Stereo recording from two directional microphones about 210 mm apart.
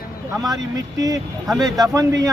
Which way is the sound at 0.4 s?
15° right (ahead or behind).